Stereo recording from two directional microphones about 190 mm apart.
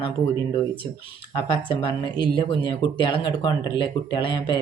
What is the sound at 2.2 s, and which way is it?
Speech, 25° left (ahead or behind).